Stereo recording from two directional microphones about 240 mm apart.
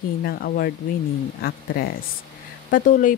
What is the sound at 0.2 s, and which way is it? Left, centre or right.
Speech, left.